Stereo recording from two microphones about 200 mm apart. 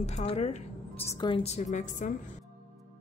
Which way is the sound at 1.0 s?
15° left (ahead or behind).